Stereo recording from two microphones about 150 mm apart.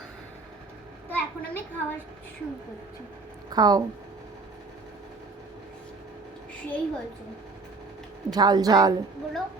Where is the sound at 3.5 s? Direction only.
25° right (ahead or behind).